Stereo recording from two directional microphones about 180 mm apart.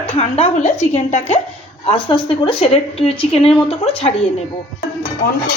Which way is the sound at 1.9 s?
30° left (ahead or behind).